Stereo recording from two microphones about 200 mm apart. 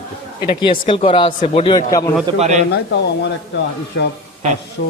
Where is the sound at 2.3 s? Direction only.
35° right (ahead or behind).